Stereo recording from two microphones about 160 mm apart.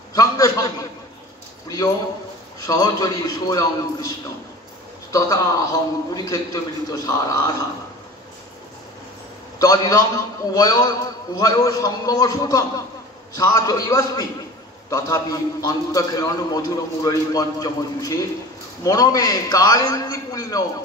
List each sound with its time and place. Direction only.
0.1 s a sound: 20° left (ahead or behind)
2.6 s a man's voice: 20° left (ahead or behind)
5.1 s a man's voice: 20° left (ahead or behind)
9.6 s a man's voice: 20° left (ahead or behind)